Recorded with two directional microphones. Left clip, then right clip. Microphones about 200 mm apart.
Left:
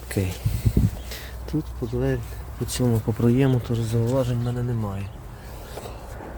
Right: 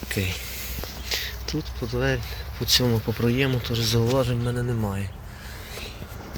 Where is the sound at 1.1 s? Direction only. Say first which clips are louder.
Right 10 dB; 35° left (ahead or behind).